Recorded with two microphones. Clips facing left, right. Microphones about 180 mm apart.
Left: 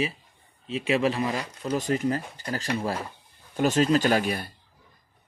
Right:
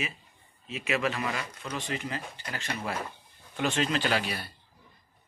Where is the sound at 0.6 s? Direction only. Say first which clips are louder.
Left 6 dB; 30° left (ahead or behind).